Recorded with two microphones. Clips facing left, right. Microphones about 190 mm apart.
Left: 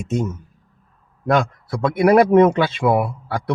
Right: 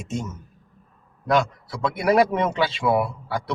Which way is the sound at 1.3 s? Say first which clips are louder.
Left 2 dB; 50° left (ahead or behind).